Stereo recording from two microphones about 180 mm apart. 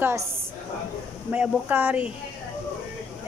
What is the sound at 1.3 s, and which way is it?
Speech, 10° right (ahead or behind).